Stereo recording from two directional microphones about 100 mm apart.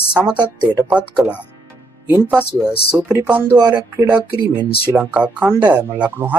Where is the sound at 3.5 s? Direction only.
40° right (ahead or behind).